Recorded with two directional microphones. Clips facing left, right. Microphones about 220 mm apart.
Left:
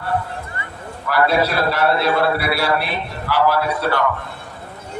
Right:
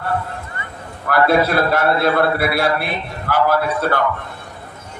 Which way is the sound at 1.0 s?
50° right (ahead or behind).